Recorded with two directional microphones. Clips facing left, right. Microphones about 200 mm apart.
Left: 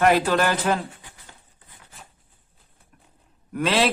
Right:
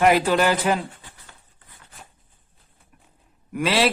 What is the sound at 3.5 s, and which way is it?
Speech, 5° right (ahead or behind).